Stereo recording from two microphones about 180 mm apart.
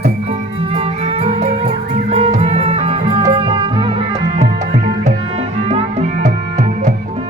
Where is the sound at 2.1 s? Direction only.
35° right (ahead or behind).